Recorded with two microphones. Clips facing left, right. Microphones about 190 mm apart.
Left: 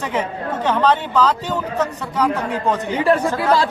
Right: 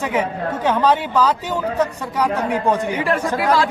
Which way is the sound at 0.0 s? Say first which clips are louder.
Right 2 dB; 10° right (ahead or behind).